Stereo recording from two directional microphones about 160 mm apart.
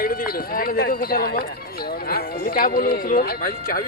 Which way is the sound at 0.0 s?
65° left (ahead or behind).